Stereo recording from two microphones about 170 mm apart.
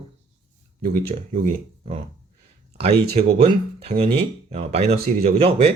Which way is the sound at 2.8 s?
35° right (ahead or behind).